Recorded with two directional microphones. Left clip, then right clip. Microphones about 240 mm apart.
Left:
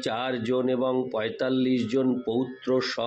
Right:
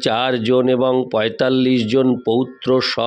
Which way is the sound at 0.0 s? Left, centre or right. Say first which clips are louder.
Right 11 dB; right.